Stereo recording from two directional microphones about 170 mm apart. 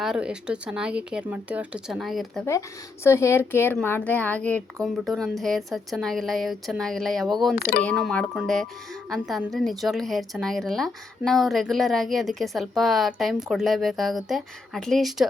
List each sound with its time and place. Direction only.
0.0 s a woman's voice: 5° right (ahead or behind)
2.5 s a woman's voice: 15° left (ahead or behind)
7.5 s speech: 60° left (ahead or behind)
7.8 s a woman's voice: 5° left (ahead or behind)